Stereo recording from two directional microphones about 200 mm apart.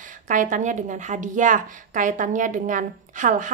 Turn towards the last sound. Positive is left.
turn(degrees=-40)  # may be behind; listen again after turning